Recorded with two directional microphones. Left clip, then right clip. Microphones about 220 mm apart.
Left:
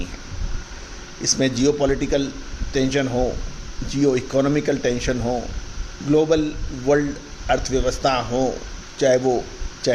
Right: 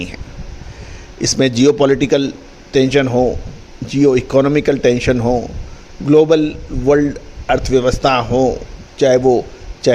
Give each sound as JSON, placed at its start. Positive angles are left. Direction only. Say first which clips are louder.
{"t": 1.2, "sound": "a man's voice", "louder": "right 7 dB", "side_deg": -40}